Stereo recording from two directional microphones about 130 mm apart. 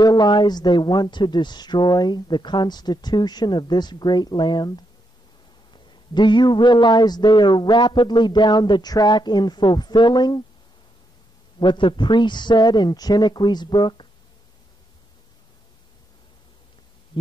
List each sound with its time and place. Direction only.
0.0 s a woman's voice: 30° left (ahead or behind)
11.6 s a woman's voice: 40° left (ahead or behind)